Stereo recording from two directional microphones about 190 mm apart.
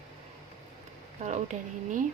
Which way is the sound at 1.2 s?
40° right (ahead or behind).